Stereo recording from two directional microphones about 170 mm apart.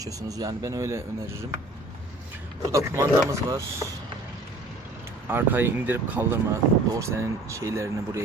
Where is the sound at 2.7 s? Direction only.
15° right (ahead or behind).